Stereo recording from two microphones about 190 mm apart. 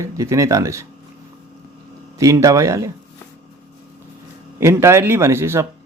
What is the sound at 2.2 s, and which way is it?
Speech, 15° right (ahead or behind).